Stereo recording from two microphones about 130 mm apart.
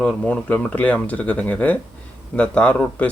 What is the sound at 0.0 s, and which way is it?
Speech, 5° left (ahead or behind).